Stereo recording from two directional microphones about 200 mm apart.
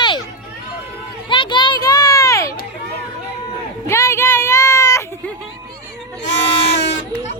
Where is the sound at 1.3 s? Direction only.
25° left (ahead or behind).